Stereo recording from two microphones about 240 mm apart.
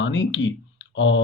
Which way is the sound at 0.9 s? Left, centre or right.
Left.